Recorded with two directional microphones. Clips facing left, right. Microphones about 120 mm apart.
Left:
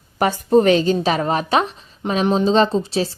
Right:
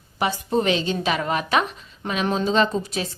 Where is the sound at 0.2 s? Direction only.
45° left (ahead or behind).